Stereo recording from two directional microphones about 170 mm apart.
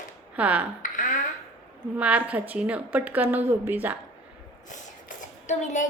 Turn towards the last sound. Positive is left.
turn(degrees=45)  # may be behind; listen again after turning